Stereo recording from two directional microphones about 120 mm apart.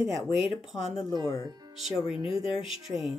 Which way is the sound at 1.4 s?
35° right (ahead or behind).